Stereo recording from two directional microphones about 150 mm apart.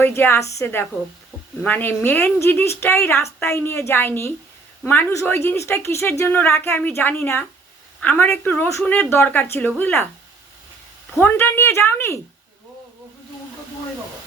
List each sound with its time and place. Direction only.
0.0 s a woman's voice: 15° left (ahead or behind)
11.2 s a woman's voice: 15° left (ahead or behind)